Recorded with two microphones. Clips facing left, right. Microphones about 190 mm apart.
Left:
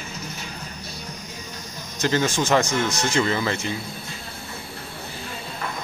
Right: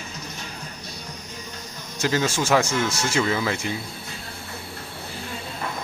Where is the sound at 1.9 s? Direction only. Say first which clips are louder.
Left 1 dB; 10° right (ahead or behind).